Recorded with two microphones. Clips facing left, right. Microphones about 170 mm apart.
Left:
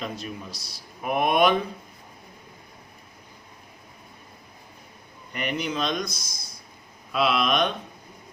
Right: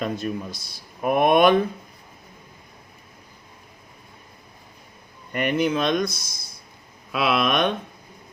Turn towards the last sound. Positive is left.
turn(degrees=-55)  # may be behind; listen again after turning